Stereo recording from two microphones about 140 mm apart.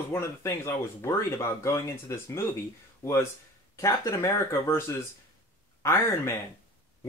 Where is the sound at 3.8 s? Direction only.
20° left (ahead or behind).